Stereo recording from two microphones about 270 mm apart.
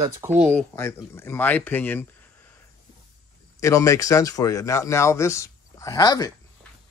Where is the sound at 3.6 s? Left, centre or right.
Centre.